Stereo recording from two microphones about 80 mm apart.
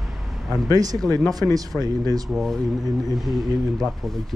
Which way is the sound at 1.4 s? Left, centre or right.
Left.